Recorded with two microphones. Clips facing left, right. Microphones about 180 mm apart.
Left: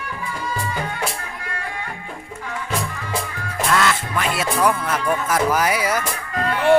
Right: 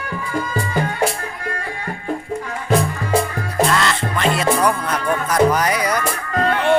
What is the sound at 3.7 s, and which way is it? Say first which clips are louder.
Music: right 1 dB; 5° left (ahead or behind).